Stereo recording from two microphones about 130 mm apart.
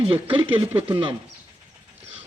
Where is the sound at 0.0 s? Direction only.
45° right (ahead or behind).